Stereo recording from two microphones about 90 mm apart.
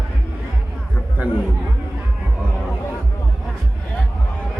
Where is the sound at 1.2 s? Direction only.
15° right (ahead or behind).